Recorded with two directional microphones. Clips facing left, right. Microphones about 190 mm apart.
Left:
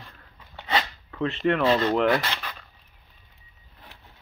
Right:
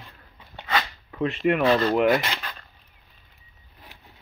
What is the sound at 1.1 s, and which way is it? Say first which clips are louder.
Speech: right 1 dB; 15° right (ahead or behind).